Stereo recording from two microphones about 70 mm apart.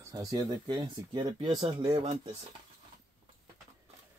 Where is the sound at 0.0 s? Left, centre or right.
Right.